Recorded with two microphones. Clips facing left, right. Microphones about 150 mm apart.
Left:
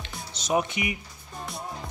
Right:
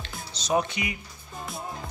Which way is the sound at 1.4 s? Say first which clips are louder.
Even; centre (ahead or behind).